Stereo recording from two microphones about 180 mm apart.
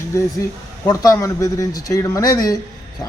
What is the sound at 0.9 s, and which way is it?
Speech, 20° left (ahead or behind).